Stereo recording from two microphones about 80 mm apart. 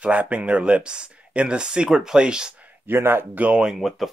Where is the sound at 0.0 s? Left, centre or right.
Centre.